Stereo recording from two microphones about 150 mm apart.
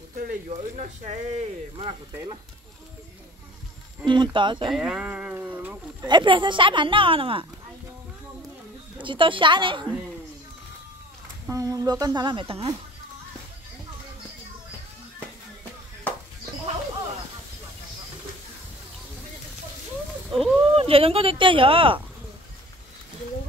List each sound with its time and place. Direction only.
0.1 s a sound: 75° right (ahead or behind)
0.5 s speech: 50° right (ahead or behind)
4.0 s a woman's voice: 30° right (ahead or behind)
4.7 s speech: 5° right (ahead or behind)
6.0 s a woman's voice: 30° right (ahead or behind)
9.0 s a woman's voice: 35° right (ahead or behind)
11.4 s speech: 20° right (ahead or behind); by 12.7 s 40° right (ahead or behind)
20.2 s a sound: centre (ahead or behind)
20.7 s a woman's voice: 40° right (ahead or behind)